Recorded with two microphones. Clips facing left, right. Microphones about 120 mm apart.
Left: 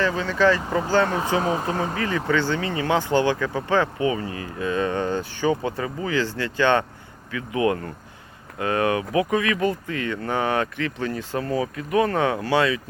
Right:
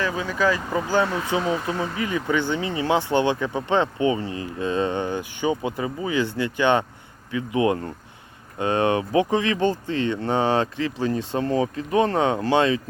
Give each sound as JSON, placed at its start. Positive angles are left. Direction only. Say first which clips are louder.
{"t": 0.0, "sound": "speech", "louder": "left 3 dB", "side_deg": -10}
{"t": 1.0, "sound": "speech", "louder": "left 1 dB", "side_deg": 35}
{"t": 2.0, "sound": "speech", "louder": "even", "side_deg": -15}